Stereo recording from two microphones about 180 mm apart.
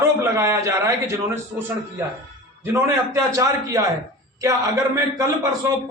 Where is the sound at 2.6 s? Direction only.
15° right (ahead or behind).